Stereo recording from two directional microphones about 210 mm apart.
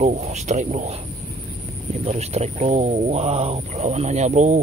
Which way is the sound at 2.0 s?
30° right (ahead or behind).